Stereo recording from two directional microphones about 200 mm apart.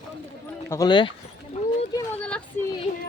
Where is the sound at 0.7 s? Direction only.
20° left (ahead or behind).